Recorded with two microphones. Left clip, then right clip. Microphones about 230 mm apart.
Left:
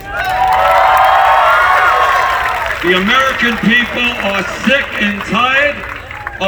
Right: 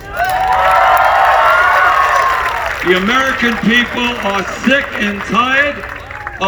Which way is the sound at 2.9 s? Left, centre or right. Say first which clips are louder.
Left 1 dB; centre.